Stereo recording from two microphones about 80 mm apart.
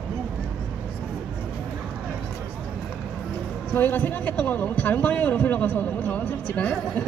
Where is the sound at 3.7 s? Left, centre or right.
Left.